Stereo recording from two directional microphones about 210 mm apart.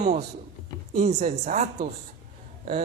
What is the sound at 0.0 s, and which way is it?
A man's voice, 35° right (ahead or behind).